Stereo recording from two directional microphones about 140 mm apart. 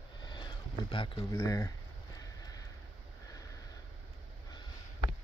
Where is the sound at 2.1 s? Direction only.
25° left (ahead or behind).